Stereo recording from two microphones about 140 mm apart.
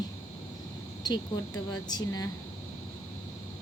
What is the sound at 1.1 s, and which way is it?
Speech, 30° left (ahead or behind).